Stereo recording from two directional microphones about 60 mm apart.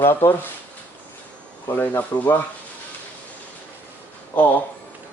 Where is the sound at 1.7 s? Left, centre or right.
Left.